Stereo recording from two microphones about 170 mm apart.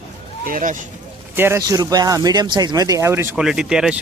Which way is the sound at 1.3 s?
15° right (ahead or behind).